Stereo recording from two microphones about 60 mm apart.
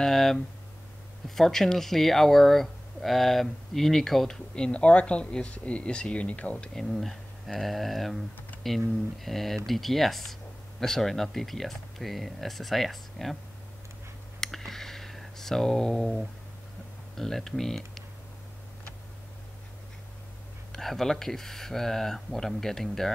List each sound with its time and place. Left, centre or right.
0.0 s speech: centre
4.6 s speech: centre
6.5 s speech: centre
14.4 s a sound: centre
17.2 s speech: centre
20.7 s speech: centre